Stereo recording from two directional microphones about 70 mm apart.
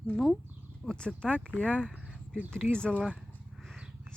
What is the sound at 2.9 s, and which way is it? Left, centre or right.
Speech, centre.